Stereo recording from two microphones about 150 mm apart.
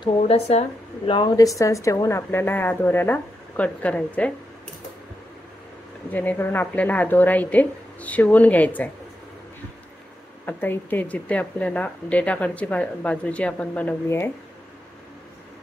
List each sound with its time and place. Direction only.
0.0 s speech: 45° left (ahead or behind); by 4.3 s 10° left (ahead or behind)
6.1 s speech: 10° left (ahead or behind)
10.4 s speech: 15° left (ahead or behind)